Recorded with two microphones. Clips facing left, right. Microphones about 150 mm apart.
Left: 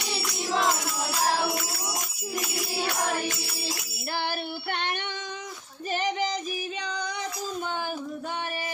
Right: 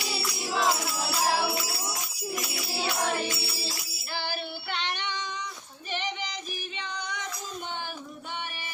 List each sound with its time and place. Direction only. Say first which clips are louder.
0.4 s music: left 1 dB; 5° right (ahead or behind)
3.2 s music: left 1 dB; 50° left (ahead or behind)
4.2 s child singing: left 2 dB; 55° left (ahead or behind)
5.9 s female singing: left 6 dB; 40° left (ahead or behind)
6.8 s child singing: left 4 dB; 35° left (ahead or behind)